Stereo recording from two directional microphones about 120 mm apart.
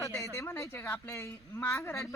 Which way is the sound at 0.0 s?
25° left (ahead or behind).